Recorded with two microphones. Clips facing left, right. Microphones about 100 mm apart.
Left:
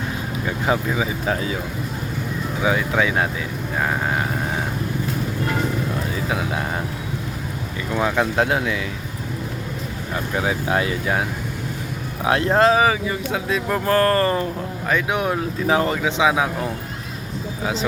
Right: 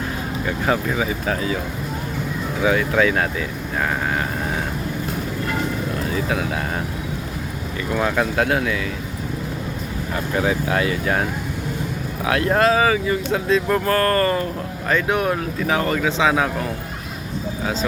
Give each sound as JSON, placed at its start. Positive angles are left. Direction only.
{"t": 0.4, "sound": "speech", "side_deg": 15}
{"t": 2.6, "sound": "speech", "side_deg": 15}
{"t": 6.2, "sound": "speech", "side_deg": 20}
{"t": 7.9, "sound": "speech", "side_deg": 15}
{"t": 10.3, "sound": "speech", "side_deg": 10}
{"t": 10.7, "sound": "speech", "side_deg": 20}
{"t": 12.2, "sound": "speech", "side_deg": 25}
{"t": 14.8, "sound": "speech", "side_deg": 10}